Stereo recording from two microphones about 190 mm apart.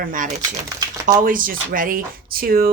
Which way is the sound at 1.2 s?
45° right (ahead or behind).